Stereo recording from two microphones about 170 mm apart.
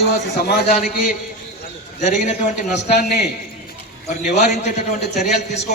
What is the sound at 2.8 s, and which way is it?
Speech, 80° left.